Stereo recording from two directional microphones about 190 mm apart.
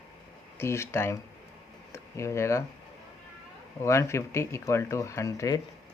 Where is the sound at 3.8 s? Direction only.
15° left (ahead or behind).